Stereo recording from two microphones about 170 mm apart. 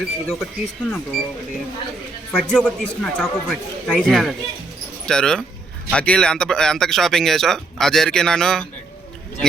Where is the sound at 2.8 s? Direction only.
10° left (ahead or behind).